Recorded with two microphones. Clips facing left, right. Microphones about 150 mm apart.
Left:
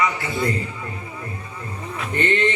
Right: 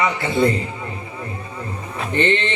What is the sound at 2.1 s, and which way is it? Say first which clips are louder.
Speech: right 1 dB; 25° right (ahead or behind).